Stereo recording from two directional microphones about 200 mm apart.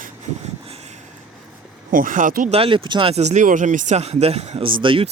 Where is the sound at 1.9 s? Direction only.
40° right (ahead or behind).